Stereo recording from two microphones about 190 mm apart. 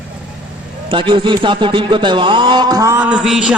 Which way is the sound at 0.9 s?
25° right (ahead or behind).